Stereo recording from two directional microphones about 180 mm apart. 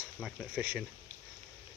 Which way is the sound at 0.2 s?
5° right (ahead or behind).